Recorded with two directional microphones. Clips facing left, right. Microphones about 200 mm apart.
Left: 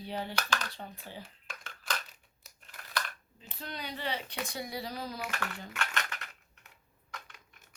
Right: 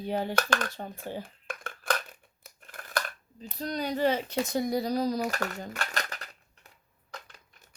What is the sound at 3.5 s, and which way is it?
Speech, 40° right (ahead or behind).